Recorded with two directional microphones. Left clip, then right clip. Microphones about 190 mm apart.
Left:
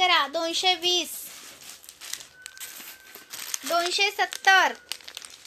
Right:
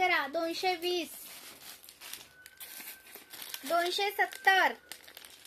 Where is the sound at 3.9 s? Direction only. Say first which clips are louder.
Left 6 dB; 20° right (ahead or behind).